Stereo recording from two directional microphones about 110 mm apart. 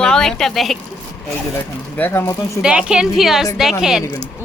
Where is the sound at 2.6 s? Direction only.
5° right (ahead or behind).